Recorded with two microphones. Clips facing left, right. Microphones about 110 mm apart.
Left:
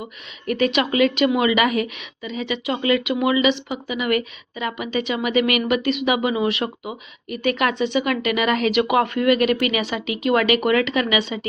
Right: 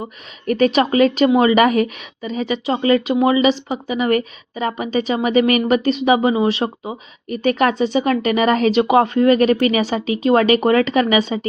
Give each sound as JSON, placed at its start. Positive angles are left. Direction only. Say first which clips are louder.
{"t": 0.0, "sound": "a woman's voice", "louder": "right 4 dB", "side_deg": -40}